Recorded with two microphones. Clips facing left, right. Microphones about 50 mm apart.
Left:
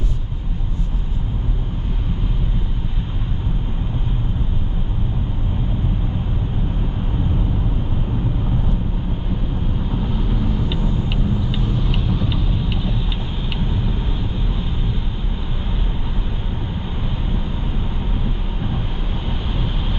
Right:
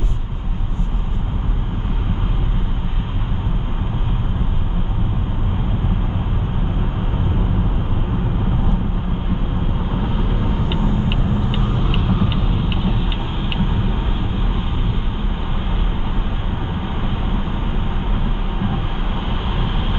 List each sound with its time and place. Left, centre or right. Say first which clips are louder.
9.8 s vehicle: right 1 dB; right
18.2 s vehicle: right 3 dB; right